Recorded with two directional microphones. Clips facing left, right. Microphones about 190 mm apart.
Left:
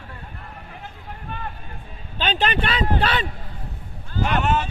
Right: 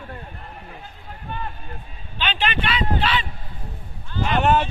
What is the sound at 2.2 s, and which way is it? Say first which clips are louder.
Speech: left 2 dB; 40° left (ahead or behind).